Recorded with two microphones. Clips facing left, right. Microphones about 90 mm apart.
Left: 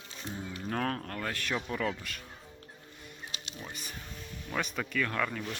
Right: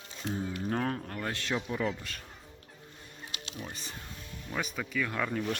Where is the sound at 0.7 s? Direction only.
15° right (ahead or behind).